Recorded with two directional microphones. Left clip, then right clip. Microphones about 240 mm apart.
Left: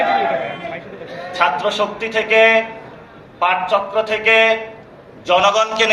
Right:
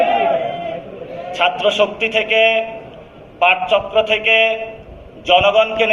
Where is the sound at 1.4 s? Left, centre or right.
Left.